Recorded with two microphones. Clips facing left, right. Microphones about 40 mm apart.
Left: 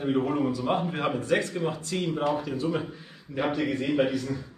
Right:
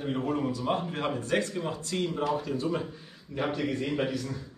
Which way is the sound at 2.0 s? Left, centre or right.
Centre.